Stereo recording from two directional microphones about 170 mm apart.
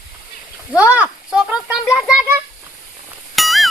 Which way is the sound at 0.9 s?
5° right (ahead or behind).